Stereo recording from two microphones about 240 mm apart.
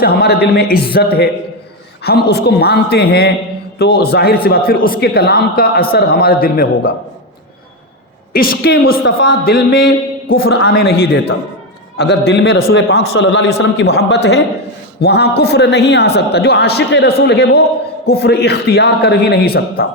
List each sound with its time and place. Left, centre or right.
0.0 s speech: left
8.3 s a man's voice: left